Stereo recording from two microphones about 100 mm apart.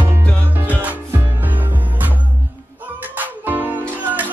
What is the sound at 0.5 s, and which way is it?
Music, 15° right (ahead or behind).